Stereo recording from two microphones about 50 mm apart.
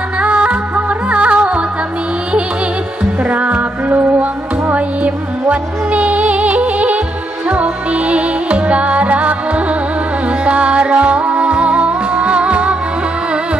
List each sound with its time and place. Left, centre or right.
0.2 s music: right
3.3 s music: right